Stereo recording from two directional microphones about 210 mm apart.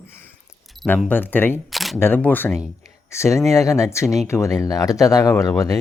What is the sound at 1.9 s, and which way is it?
Speech, 10° left (ahead or behind).